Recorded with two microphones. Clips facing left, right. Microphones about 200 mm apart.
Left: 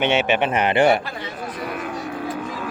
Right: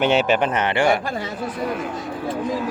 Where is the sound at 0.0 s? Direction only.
Centre (ahead or behind).